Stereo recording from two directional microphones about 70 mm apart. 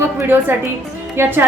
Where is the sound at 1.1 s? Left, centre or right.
Right.